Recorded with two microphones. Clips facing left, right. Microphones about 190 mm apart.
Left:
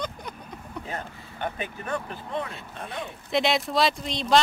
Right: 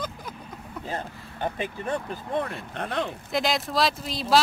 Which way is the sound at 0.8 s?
30° right (ahead or behind).